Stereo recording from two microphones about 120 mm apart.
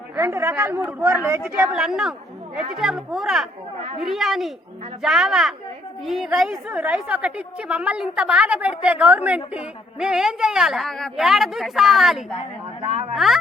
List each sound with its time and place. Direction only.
0.2 s a woman's voice: 20° right (ahead or behind)
1.7 s a woman's voice: 5° right (ahead or behind)
12.8 s speech: 55° right (ahead or behind)
13.1 s a woman's voice: centre (ahead or behind)